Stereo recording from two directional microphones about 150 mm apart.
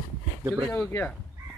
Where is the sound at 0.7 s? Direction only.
10° left (ahead or behind).